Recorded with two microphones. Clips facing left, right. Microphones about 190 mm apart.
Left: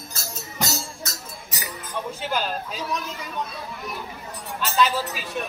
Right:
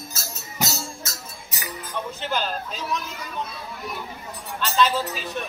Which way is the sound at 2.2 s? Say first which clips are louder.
Even; 10° left (ahead or behind).